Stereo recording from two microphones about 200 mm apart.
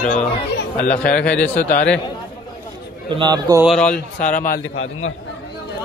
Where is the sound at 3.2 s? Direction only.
20° right (ahead or behind).